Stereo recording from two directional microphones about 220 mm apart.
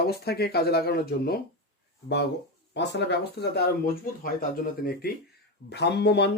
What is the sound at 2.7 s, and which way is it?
Speech, 50° left (ahead or behind).